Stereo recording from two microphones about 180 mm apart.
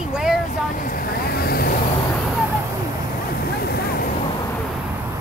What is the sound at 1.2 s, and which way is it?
Vehicle, 60° left (ahead or behind).